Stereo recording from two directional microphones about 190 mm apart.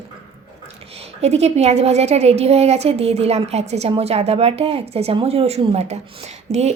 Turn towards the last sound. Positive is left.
turn(degrees=-35)  # may be behind; listen again after turning